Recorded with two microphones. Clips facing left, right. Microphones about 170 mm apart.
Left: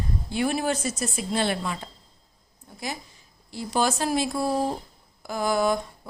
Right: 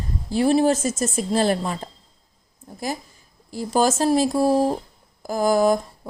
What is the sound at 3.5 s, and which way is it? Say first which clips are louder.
Speech: right 5 dB; 40° right (ahead or behind).